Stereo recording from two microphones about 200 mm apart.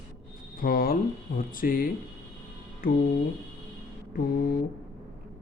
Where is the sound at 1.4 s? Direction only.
45° left (ahead or behind).